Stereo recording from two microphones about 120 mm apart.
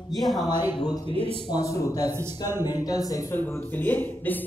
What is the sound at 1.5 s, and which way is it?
A man's voice, 30° left (ahead or behind).